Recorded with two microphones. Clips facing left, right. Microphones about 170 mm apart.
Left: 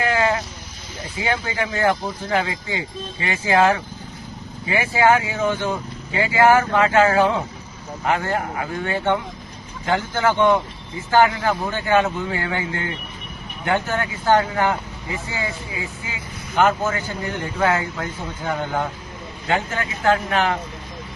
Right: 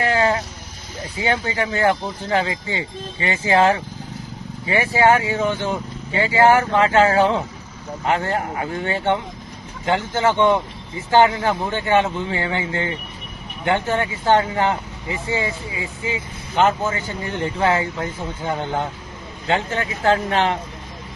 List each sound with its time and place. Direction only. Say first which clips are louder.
0.0 s sheep: right 1 dB; 30° right (ahead or behind)
1.2 s speech: right 2 dB; 30° right (ahead or behind)
3.5 s speech: even; 30° right (ahead or behind)